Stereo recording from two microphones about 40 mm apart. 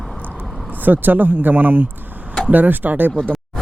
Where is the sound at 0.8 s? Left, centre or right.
Right.